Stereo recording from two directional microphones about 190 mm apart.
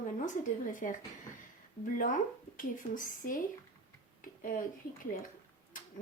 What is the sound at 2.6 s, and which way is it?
Speech, 45° left (ahead or behind).